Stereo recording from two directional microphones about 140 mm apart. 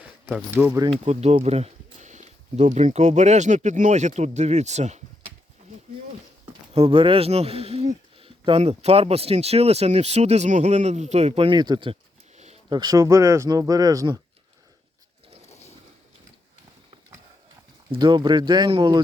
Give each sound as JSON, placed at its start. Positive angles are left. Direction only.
{"t": 0.0, "sound": "speech", "side_deg": -10}
{"t": 1.0, "sound": "speech", "side_deg": -50}
{"t": 6.7, "sound": "speech", "side_deg": -40}
{"t": 17.9, "sound": "speech", "side_deg": -35}